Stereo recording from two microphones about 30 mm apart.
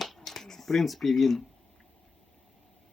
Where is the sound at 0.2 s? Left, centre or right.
Centre.